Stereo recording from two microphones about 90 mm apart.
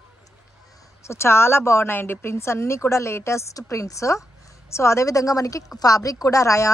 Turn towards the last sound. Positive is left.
turn(degrees=35)  # may be behind; listen again after turning